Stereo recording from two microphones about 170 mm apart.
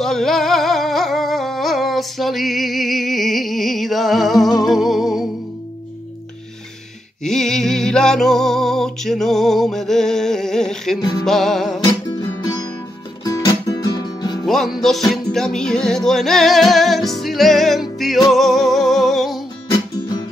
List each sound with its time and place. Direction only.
0.0 s singing: centre (ahead or behind)
7.2 s music: 5° left (ahead or behind)
11.8 s music: 25° left (ahead or behind)
14.4 s music: centre (ahead or behind)